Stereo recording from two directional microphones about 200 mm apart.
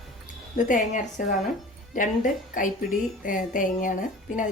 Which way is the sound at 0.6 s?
40° left (ahead or behind).